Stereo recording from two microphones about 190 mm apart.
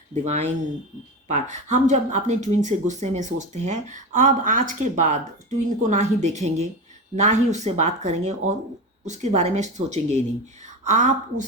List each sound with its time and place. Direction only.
0.1 s speech: 35° right (ahead or behind)